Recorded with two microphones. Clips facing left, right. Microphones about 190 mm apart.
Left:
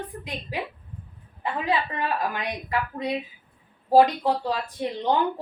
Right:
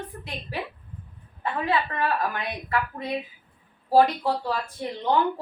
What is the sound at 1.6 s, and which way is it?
Speech, 15° left (ahead or behind).